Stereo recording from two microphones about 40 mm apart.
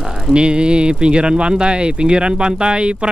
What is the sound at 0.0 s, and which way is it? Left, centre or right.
Speech, centre.